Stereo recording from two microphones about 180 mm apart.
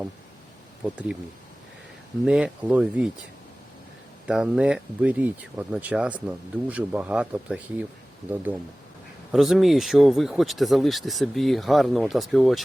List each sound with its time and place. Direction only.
2.2 s speech: 5° right (ahead or behind)
4.3 s speech: 5° right (ahead or behind)
9.3 s speech: centre (ahead or behind)